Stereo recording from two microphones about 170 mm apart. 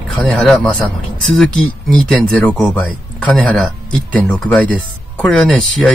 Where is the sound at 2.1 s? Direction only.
5° left (ahead or behind).